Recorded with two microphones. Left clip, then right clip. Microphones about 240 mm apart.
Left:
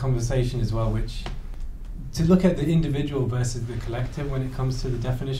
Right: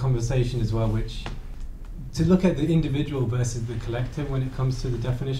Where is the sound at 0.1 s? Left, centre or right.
Left.